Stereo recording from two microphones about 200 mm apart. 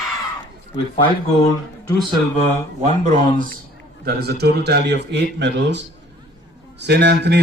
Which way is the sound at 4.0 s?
55° right (ahead or behind).